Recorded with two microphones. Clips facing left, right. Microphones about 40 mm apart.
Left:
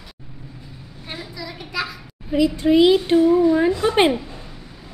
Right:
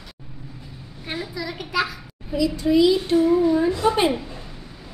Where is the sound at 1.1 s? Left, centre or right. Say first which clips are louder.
Right 4 dB; centre.